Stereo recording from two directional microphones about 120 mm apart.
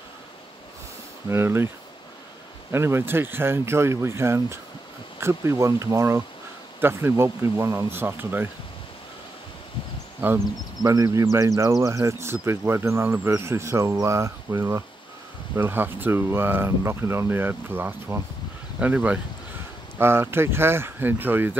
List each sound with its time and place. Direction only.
1.3 s speech: 20° right (ahead or behind)
2.7 s speech: 20° right (ahead or behind)
10.8 s speech: 30° right (ahead or behind)